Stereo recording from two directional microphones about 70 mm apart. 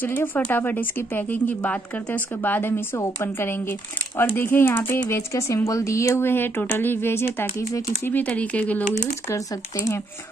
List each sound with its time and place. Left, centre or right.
0.0 s speech: left
5.3 s speech: left
6.2 s speech: left
8.1 s speech: left